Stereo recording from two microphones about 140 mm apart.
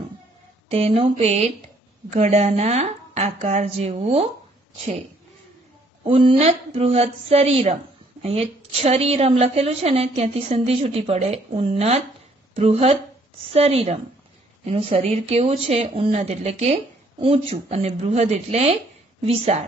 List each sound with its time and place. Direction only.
0.7 s a woman's voice: 45° right (ahead or behind)
6.0 s a woman's voice: 40° right (ahead or behind)